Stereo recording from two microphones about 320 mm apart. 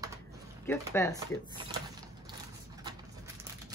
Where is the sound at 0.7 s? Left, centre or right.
Centre.